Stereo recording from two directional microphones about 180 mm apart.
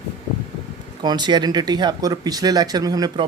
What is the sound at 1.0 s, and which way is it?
Speech, 25° right (ahead or behind).